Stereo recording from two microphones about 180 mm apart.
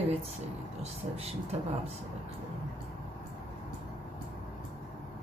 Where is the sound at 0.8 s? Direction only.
35° right (ahead or behind).